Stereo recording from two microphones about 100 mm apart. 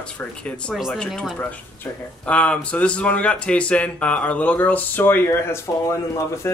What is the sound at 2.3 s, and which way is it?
Speech, 10° left (ahead or behind).